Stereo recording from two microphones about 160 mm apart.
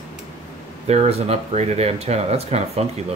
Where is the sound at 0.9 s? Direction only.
40° right (ahead or behind).